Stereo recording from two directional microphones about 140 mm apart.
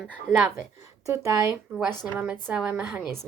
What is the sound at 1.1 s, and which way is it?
Speech, 20° right (ahead or behind).